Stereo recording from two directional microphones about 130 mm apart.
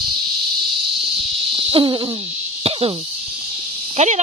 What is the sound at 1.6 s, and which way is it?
Owl, 40° right (ahead or behind).